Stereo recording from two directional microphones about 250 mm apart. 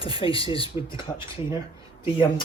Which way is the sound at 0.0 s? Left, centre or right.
Left.